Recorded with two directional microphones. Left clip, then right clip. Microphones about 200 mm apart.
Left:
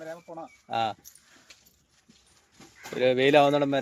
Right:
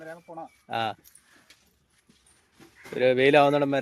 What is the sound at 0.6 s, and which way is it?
Speech, 20° right (ahead or behind).